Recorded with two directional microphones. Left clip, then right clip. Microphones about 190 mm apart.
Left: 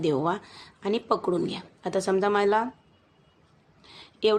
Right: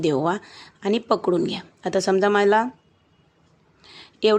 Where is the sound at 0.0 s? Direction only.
30° right (ahead or behind).